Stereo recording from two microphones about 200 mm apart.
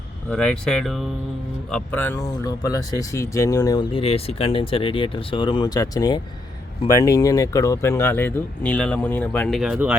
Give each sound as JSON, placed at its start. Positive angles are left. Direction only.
{"t": 0.3, "sound": "speech", "side_deg": 5}